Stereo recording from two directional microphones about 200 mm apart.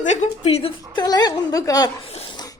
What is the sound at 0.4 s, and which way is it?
A woman's voice, 25° left (ahead or behind).